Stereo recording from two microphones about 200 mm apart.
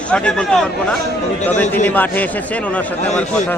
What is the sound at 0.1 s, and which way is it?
A man's voice, 5° left (ahead or behind).